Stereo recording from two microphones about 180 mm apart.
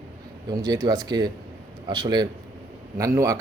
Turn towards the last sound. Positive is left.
turn(degrees=-20)  # may be behind; listen again after turning